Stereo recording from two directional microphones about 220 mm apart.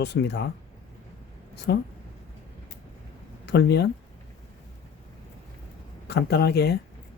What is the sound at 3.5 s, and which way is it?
Speech, 50° left (ahead or behind).